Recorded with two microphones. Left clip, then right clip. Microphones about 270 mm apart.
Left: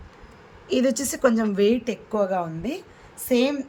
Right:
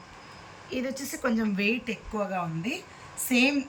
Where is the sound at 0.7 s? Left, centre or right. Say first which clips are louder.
Left 10 dB; left.